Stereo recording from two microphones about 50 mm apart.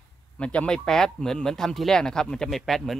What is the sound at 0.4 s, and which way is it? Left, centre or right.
Speech, left.